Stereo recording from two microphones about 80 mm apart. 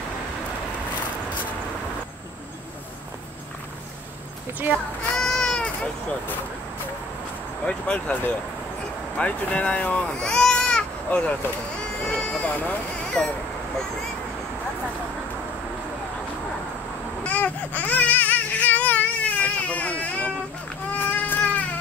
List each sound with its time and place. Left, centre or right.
5.2 s baby cry: centre
7.6 s speech: centre
13.2 s speech: centre
17.2 s baby cry: centre
20.9 s a sound: left